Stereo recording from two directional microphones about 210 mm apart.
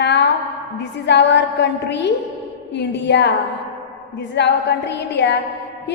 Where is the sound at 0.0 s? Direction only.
55° left (ahead or behind).